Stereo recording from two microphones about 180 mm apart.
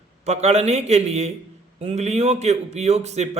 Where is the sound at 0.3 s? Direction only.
35° right (ahead or behind).